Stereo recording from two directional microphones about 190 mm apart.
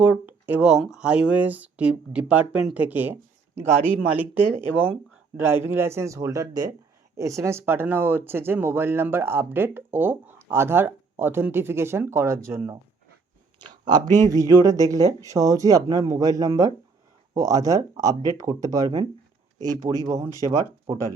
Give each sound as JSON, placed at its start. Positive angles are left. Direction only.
{"t": 0.0, "sound": "speech", "side_deg": -10}
{"t": 13.6, "sound": "a sound", "side_deg": -25}
{"t": 14.2, "sound": "speech", "side_deg": -15}